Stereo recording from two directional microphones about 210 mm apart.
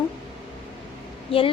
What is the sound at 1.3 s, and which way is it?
Speech, 25° left (ahead or behind).